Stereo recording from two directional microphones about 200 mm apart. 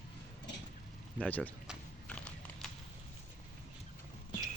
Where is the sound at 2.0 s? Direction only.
5° left (ahead or behind).